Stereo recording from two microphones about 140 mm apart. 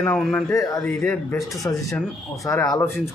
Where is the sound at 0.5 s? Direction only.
25° left (ahead or behind).